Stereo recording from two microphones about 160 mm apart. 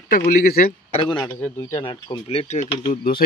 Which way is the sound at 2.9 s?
65° left (ahead or behind).